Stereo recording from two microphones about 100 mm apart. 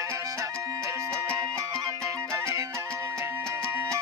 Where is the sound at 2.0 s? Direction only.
25° right (ahead or behind).